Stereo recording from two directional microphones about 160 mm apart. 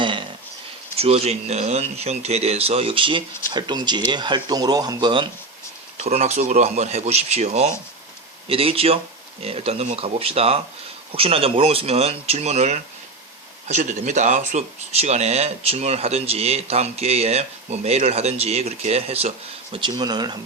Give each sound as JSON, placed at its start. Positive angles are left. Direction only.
{"t": 0.0, "sound": "a sound", "side_deg": -30}
{"t": 0.9, "sound": "speech", "side_deg": -40}
{"t": 6.1, "sound": "speech", "side_deg": -45}
{"t": 19.7, "sound": "speech", "side_deg": -30}